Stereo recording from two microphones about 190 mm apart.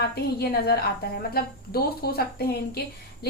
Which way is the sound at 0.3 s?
55° left (ahead or behind).